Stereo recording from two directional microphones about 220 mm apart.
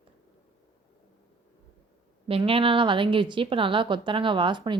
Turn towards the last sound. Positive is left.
turn(degrees=-20)  # may be behind; listen again after turning